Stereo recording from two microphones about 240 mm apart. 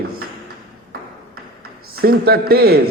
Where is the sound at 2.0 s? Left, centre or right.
Right.